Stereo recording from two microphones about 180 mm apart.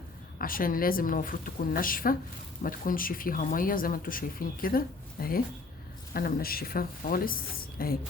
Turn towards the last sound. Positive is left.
turn(degrees=55)  # may be behind; listen again after turning